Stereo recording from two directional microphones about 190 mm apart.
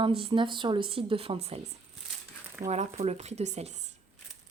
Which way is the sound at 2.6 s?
35° right (ahead or behind).